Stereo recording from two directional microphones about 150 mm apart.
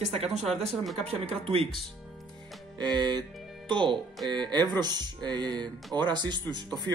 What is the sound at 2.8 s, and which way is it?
Speech, 30° right (ahead or behind).